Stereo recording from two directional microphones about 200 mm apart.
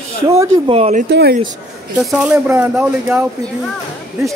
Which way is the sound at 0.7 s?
30° right (ahead or behind).